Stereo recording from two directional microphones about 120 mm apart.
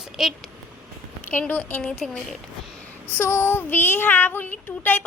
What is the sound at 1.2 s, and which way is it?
Child singing, 15° left (ahead or behind).